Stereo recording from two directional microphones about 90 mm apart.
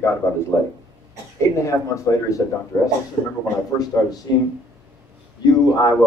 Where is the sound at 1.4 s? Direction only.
35° left (ahead or behind).